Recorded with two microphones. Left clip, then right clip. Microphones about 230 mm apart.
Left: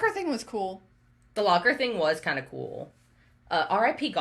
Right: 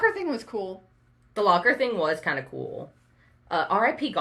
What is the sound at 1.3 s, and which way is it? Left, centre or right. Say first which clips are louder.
Speech: right 2 dB; centre.